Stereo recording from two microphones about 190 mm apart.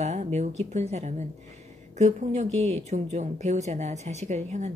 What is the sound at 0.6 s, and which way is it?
Speech, 35° right (ahead or behind).